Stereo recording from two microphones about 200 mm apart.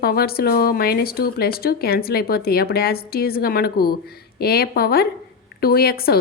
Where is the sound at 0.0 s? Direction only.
50° left (ahead or behind).